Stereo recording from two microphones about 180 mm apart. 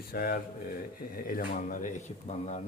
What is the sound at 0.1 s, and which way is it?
A man's voice, 55° left (ahead or behind).